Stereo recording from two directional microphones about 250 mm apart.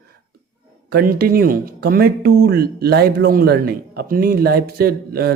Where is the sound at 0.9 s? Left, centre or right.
Right.